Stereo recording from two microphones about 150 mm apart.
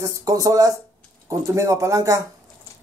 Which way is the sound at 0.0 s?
20° right (ahead or behind).